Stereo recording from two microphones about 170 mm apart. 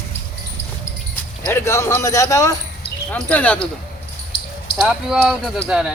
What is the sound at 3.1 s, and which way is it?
Speech, 10° left (ahead or behind).